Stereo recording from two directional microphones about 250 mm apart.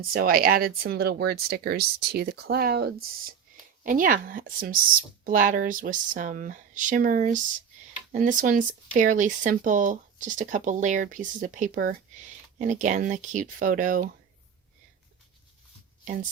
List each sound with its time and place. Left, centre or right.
0.1 s speech: right